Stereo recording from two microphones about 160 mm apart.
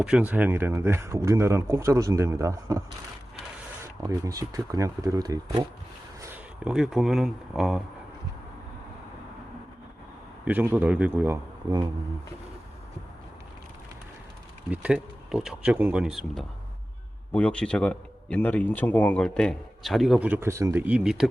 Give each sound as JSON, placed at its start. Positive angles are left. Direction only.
{"t": 0.0, "sound": "speech", "side_deg": -5}
{"t": 4.0, "sound": "speech", "side_deg": -20}
{"t": 6.2, "sound": "speech", "side_deg": -10}
{"t": 10.4, "sound": "speech", "side_deg": -10}
{"t": 14.7, "sound": "a man's voice", "side_deg": -5}